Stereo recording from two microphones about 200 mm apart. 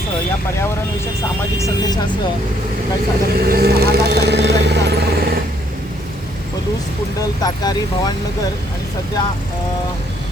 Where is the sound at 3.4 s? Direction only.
50° right (ahead or behind).